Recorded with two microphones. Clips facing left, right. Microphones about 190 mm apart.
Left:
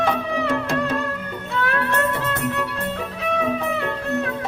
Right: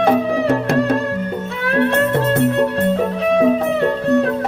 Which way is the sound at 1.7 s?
30° right (ahead or behind).